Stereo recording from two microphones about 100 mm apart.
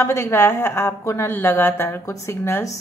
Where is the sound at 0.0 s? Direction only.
25° left (ahead or behind).